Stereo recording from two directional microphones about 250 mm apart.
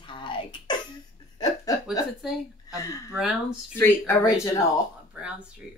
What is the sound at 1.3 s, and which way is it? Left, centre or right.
Laughter, centre.